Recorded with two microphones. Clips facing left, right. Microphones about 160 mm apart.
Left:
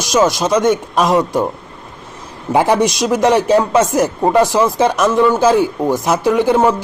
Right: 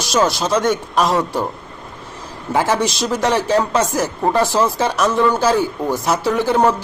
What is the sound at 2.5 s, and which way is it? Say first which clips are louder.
Speech: left 5 dB; 20° left (ahead or behind).